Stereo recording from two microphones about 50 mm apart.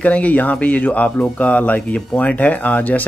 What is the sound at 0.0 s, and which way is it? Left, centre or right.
Speech, left.